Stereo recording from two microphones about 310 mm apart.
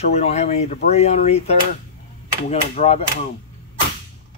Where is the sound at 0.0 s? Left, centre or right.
Left.